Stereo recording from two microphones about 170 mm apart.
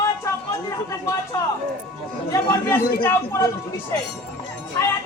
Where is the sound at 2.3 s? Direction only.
15° left (ahead or behind).